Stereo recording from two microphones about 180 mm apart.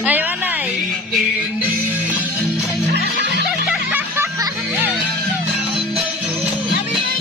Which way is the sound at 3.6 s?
10° right (ahead or behind).